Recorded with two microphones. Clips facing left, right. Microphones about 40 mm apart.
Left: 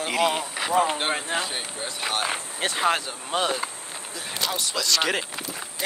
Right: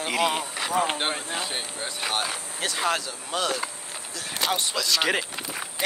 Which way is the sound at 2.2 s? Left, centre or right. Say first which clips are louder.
Left 3 dB; left.